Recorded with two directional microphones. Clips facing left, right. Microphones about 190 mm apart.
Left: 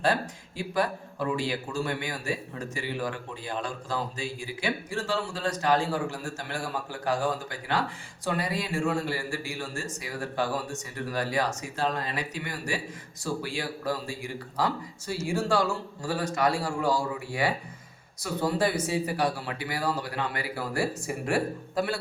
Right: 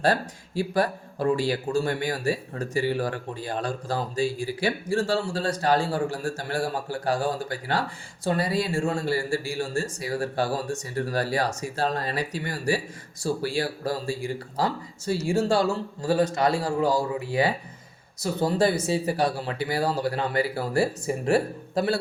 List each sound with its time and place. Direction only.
0.0 s speech: 35° right (ahead or behind)